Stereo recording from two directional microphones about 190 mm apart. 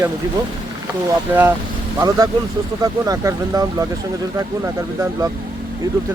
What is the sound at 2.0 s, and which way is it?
Speech, 20° right (ahead or behind).